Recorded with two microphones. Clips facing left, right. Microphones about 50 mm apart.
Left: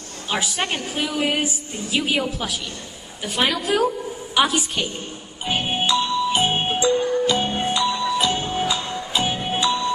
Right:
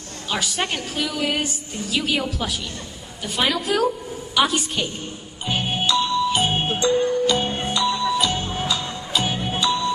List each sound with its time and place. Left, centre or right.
0.7 s a woman's voice: centre
3.3 s a woman's voice: centre
5.5 s music: centre